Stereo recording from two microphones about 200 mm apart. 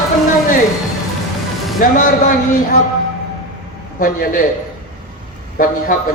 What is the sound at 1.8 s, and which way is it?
Speech, 40° left (ahead or behind).